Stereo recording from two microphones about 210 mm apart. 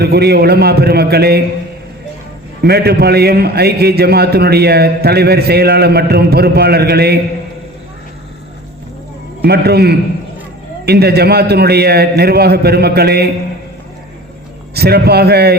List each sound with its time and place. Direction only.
0.0 s a man's voice: 50° right (ahead or behind)
2.6 s a man's voice: 50° right (ahead or behind)
9.4 s a man's voice: 50° right (ahead or behind)
14.8 s a man's voice: 50° right (ahead or behind)